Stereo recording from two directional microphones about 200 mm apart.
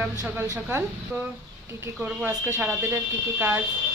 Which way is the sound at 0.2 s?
15° right (ahead or behind).